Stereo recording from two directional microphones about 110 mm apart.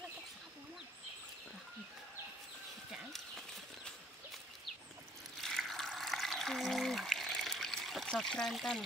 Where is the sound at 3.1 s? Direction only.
5° left (ahead or behind).